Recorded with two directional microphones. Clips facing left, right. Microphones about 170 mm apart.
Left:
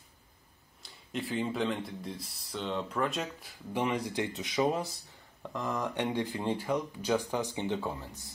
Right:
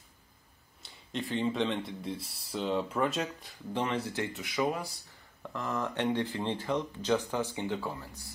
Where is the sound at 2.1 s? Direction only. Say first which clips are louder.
Right 2 dB; 30° right (ahead or behind).